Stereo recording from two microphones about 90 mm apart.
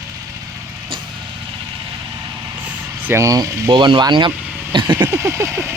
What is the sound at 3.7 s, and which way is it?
Speech, 65° right (ahead or behind).